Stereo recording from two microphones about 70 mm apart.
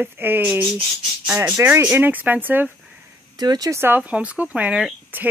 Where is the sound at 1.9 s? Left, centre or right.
Right.